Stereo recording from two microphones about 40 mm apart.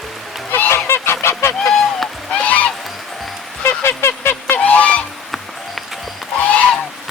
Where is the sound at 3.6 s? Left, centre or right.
Left.